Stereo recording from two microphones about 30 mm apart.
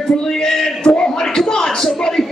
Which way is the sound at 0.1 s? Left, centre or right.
Left.